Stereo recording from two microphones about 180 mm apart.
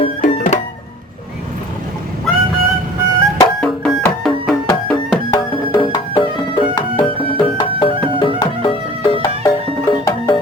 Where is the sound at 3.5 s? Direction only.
Centre (ahead or behind).